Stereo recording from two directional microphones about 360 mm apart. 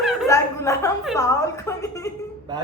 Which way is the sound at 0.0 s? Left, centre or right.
Centre.